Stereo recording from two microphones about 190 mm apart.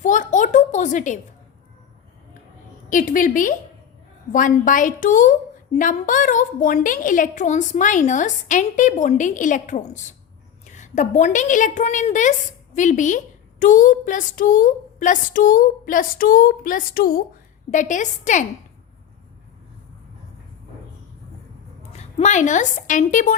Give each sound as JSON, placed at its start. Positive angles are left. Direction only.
{"t": 0.0, "sound": "a woman's voice", "side_deg": 40}
{"t": 2.9, "sound": "a woman's voice", "side_deg": 45}
{"t": 22.2, "sound": "a woman's voice", "side_deg": 40}